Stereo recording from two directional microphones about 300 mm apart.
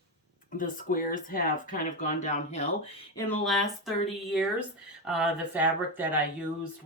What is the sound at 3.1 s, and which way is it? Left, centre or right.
Speech, centre.